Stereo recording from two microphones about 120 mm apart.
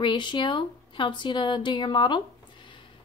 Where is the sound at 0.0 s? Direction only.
40° left (ahead or behind).